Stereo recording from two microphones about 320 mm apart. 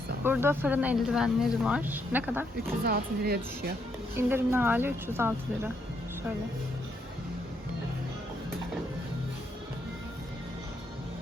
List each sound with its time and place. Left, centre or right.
0.3 s speech: centre
2.8 s a woman's voice: right
4.1 s speech: centre